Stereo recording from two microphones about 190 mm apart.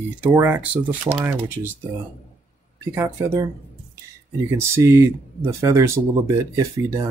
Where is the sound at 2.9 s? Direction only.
15° right (ahead or behind).